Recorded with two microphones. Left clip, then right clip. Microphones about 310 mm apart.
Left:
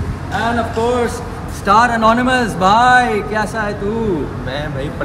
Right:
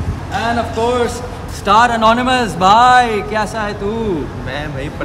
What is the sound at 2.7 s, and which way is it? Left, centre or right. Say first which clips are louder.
Speech: right 2 dB; centre.